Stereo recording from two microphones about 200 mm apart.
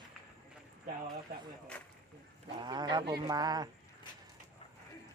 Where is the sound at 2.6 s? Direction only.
20° right (ahead or behind).